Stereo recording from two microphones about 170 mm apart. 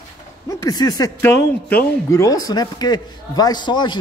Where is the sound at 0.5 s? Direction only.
25° left (ahead or behind).